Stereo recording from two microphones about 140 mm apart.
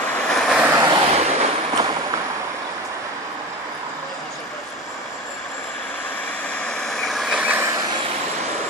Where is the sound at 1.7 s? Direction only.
25° right (ahead or behind).